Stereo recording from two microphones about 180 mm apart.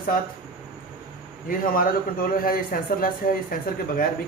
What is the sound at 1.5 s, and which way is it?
A man's voice, 50° left (ahead or behind).